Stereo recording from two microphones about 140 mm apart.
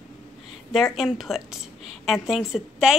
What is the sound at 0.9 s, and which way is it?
A woman's voice, centre (ahead or behind).